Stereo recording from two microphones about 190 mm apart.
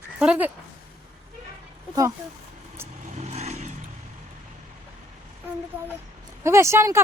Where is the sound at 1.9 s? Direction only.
15° right (ahead or behind).